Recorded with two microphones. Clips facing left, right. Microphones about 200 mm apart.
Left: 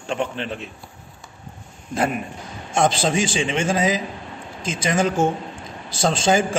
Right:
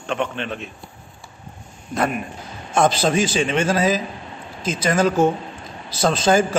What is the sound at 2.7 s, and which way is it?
A man's voice, 25° left (ahead or behind).